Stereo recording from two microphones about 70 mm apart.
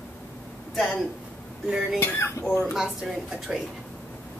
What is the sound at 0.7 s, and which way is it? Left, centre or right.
Speech, centre.